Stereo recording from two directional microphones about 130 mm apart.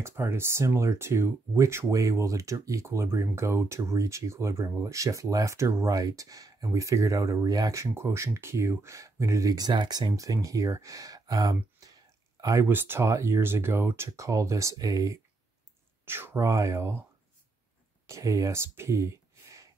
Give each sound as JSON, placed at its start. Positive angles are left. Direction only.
{"t": 0.0, "sound": "speech", "side_deg": -20}
{"t": 18.0, "sound": "speech", "side_deg": -25}